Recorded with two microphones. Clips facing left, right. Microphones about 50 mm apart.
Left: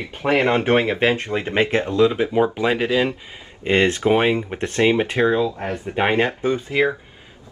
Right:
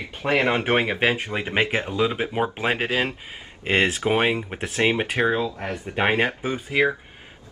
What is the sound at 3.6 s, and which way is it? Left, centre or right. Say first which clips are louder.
Speech: left 4 dB; centre.